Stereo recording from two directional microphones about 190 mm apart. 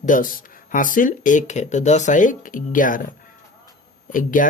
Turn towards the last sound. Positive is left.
turn(degrees=45)  # may be behind; listen again after turning